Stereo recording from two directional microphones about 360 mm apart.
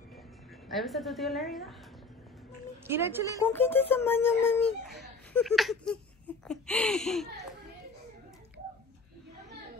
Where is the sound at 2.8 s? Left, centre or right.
Centre.